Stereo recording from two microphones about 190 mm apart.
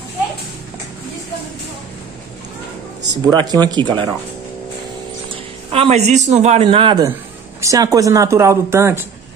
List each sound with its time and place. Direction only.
3.3 s speech: 20° right (ahead or behind)
5.3 s a man's voice: 30° right (ahead or behind); by 9.0 s 15° right (ahead or behind)